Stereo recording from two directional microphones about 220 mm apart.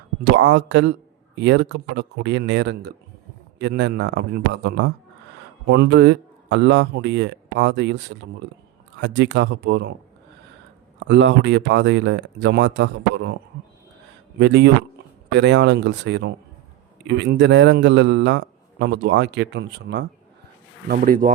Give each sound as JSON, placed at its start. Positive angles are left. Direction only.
{"t": 0.3, "sound": "a man's voice", "side_deg": -55}
{"t": 11.1, "sound": "a man's voice", "side_deg": -55}
{"t": 14.3, "sound": "a man's voice", "side_deg": -50}
{"t": 20.8, "sound": "speech", "side_deg": -40}